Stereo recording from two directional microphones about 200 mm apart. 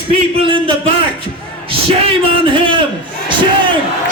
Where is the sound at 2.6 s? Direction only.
25° right (ahead or behind).